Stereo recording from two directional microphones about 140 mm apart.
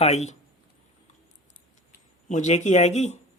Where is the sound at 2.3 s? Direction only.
60° left (ahead or behind).